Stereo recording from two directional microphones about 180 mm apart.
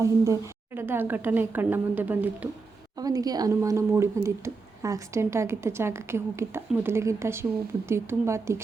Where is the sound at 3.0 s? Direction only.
20° right (ahead or behind).